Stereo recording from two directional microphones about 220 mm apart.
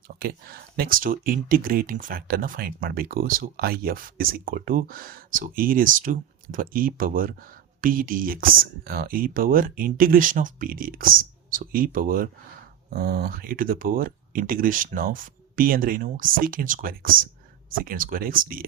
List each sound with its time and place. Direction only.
0.2 s speech: 45° right (ahead or behind)